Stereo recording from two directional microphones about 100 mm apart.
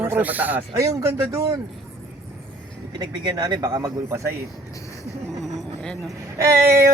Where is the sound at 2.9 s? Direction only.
45° right (ahead or behind).